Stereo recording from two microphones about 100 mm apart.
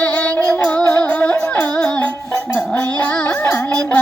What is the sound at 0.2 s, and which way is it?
Music, 15° left (ahead or behind).